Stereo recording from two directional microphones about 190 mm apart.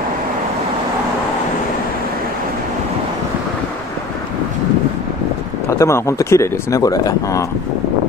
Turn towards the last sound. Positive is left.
turn(degrees=20)  # may be behind; listen again after turning